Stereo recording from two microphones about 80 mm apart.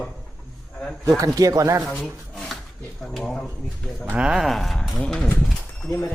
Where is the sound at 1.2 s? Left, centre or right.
Right.